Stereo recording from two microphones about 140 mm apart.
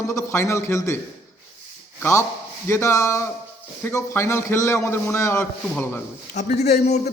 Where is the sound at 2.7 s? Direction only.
20° left (ahead or behind).